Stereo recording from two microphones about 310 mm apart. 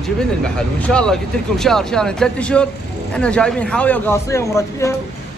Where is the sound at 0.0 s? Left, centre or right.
Centre.